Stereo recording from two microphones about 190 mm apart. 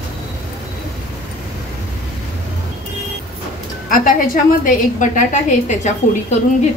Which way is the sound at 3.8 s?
45° left (ahead or behind).